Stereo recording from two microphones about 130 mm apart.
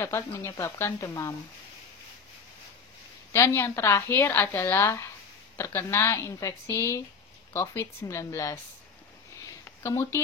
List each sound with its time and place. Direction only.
0.0 s a woman's voice: 20° left (ahead or behind)
3.3 s a woman's voice: 20° left (ahead or behind)
9.7 s speech: 20° left (ahead or behind)